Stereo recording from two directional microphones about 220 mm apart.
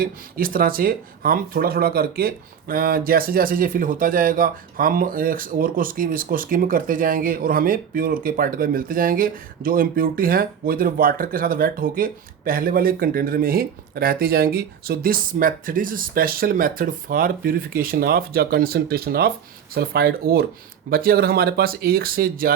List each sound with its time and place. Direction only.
0.0 s speech: 40° right (ahead or behind)